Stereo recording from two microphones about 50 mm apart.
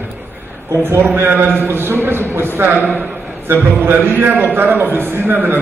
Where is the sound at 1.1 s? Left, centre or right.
Right.